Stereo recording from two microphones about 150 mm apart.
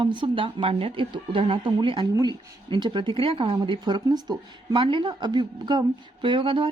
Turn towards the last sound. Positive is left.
turn(degrees=-35)  # may be behind; listen again after turning